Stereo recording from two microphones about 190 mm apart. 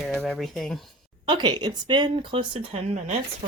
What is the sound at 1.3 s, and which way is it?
Speech, 25° right (ahead or behind).